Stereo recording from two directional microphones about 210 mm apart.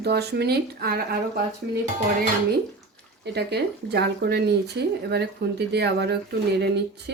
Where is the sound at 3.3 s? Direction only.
50° right (ahead or behind).